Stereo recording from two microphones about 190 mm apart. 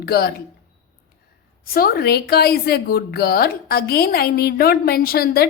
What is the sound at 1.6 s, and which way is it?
A woman's voice, 50° left (ahead or behind).